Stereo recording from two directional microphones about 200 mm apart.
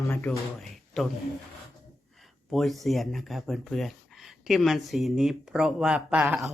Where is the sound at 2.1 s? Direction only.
Centre (ahead or behind).